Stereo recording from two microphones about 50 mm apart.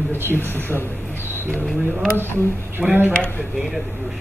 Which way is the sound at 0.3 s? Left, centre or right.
Left.